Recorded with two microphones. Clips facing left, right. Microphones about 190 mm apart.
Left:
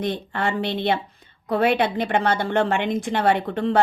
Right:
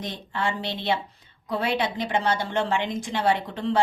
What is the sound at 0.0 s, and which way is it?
Speech, 60° left (ahead or behind).